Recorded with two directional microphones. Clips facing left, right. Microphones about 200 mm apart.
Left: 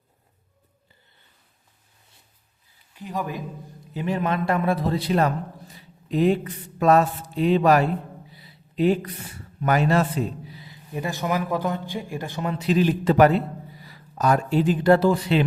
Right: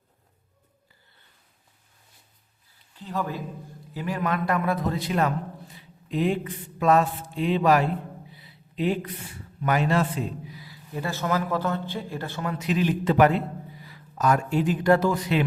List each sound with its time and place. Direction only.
2.9 s a man's voice: 15° left (ahead or behind); by 7.9 s 40° left (ahead or behind)
8.4 s a sound: 40° left (ahead or behind)
9.6 s a man's voice: 40° left (ahead or behind)
10.5 s speech: 20° left (ahead or behind)
12.5 s a man's voice: 35° left (ahead or behind)